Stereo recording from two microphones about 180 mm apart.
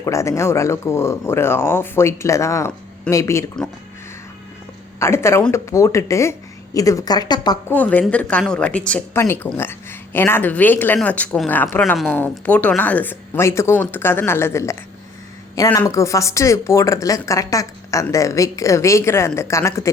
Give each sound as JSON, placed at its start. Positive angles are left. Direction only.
{"t": 0.0, "sound": "speech", "side_deg": 15}
{"t": 4.9, "sound": "a woman's voice", "side_deg": 15}
{"t": 7.7, "sound": "speech", "side_deg": 10}